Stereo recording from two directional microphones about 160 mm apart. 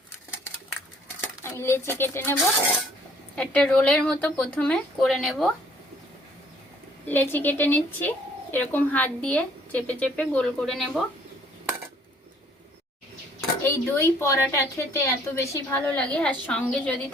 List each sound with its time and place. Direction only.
1.5 s speech: 15° left (ahead or behind)
3.3 s a woman's voice: 10° left (ahead or behind)
7.1 s speech: 10° left (ahead or behind)
13.6 s speech: 15° left (ahead or behind)